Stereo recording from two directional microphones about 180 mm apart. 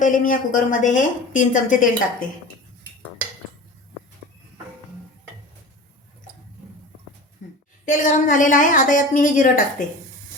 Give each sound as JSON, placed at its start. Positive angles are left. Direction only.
{"t": 0.0, "sound": "a woman's voice", "side_deg": 50}
{"t": 7.9, "sound": "a woman's voice", "side_deg": 45}